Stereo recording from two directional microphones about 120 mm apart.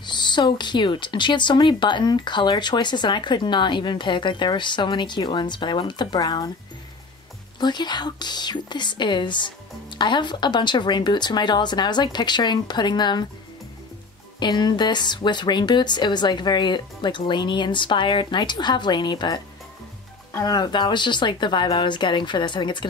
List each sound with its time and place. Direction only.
0.0 s speech: 40° left (ahead or behind)
7.6 s speech: 35° left (ahead or behind)
14.4 s speech: 35° left (ahead or behind)